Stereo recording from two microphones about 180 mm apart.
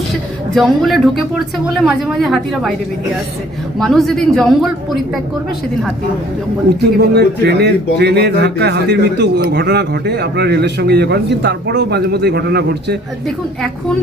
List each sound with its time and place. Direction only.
0.5 s a woman's voice: centre (ahead or behind)
3.8 s a woman's voice: centre (ahead or behind)
7.1 s speech: 65° right (ahead or behind)